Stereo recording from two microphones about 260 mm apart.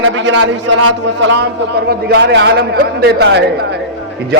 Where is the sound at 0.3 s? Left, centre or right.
Right.